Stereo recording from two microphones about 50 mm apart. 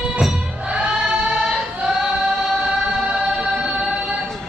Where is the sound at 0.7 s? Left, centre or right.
Centre.